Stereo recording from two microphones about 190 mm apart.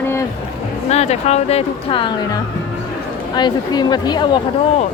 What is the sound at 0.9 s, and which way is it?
A woman's voice, 35° left (ahead or behind).